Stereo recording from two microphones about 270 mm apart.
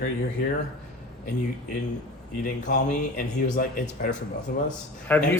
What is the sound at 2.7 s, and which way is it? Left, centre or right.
Speech, left.